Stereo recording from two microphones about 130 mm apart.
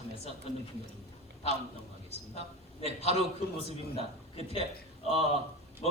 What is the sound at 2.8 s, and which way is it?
A man's voice, 55° left (ahead or behind).